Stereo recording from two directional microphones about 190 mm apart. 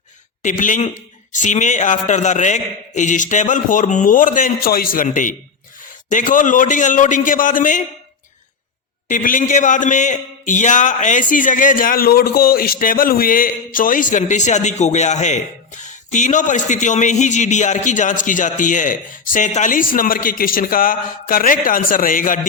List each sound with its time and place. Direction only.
0.4 s a man's voice: 40° left (ahead or behind)
9.0 s a man's voice: 45° left (ahead or behind)